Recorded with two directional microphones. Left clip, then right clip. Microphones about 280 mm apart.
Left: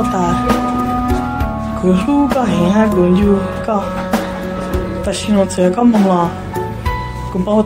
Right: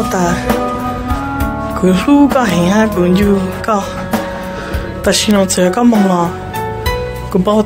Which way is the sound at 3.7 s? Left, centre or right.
Right.